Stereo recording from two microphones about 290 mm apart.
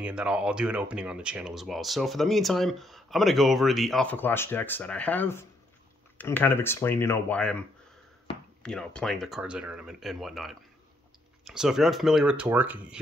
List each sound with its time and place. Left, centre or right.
0.0 s speech: centre
8.6 s speech: centre